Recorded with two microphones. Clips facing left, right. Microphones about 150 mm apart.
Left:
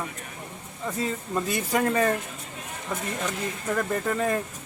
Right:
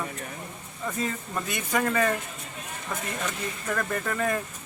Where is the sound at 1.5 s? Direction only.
35° left (ahead or behind).